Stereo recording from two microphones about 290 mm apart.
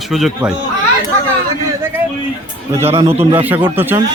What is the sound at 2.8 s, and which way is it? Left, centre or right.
Speech, centre.